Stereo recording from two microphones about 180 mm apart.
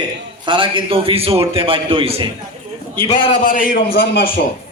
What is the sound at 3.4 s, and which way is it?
Speech, 50° left (ahead or behind).